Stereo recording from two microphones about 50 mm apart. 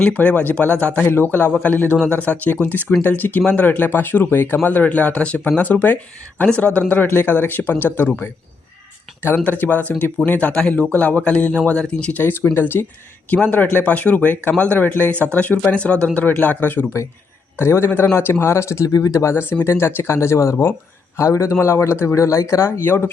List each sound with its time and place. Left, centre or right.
0.0 s speech: left
1.0 s a man's voice: left
3.4 s speech: left
3.7 s speech: left
7.0 s speech: left
9.4 s speech: left
10.5 s speech: centre
12.1 s a man's voice: left
13.3 s speech: left
16.1 s speech: left
17.6 s speech: left
18.2 s a man's voice: left
21.6 s speech: left
22.8 s a man's voice: left